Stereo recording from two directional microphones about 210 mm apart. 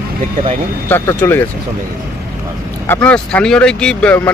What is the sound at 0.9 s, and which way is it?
Speech, 10° left (ahead or behind).